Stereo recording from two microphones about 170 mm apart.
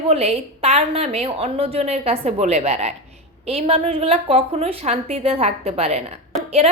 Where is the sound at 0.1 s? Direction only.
35° right (ahead or behind).